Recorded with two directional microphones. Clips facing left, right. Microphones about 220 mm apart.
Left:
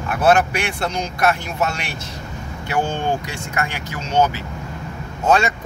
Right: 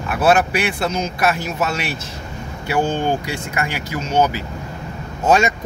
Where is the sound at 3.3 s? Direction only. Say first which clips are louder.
Right 2 dB; 5° right (ahead or behind).